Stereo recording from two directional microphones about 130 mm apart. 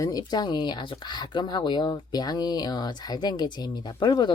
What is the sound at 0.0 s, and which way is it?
Speech, 30° left (ahead or behind).